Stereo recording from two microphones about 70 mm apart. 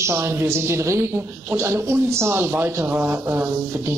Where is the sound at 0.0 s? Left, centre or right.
Right.